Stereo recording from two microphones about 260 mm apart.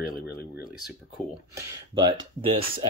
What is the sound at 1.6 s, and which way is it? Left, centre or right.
Speech, centre.